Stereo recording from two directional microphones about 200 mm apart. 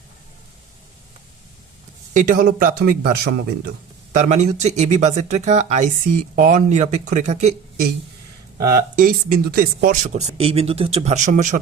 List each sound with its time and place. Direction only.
2.1 s speech: 40° right (ahead or behind)
4.1 s speech: 35° right (ahead or behind)
8.5 s speech: 45° right (ahead or behind)